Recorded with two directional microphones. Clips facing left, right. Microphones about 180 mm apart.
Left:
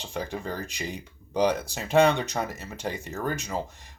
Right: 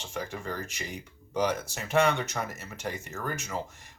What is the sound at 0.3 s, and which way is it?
Speech, 15° left (ahead or behind).